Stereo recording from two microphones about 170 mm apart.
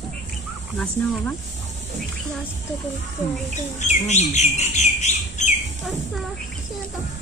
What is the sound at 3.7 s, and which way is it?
Speech, 45° left (ahead or behind).